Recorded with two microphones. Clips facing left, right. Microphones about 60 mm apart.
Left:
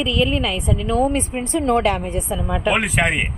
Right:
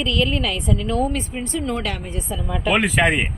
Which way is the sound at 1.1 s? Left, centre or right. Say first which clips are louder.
Left 4 dB; left.